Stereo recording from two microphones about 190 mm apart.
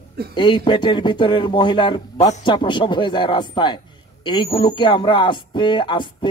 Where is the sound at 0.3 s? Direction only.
25° left (ahead or behind).